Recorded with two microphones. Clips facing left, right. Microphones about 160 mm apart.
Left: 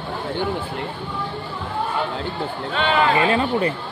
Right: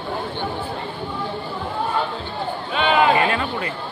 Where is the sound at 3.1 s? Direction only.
30° left (ahead or behind).